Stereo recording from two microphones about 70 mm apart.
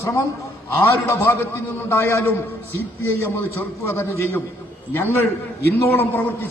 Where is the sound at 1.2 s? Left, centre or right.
Left.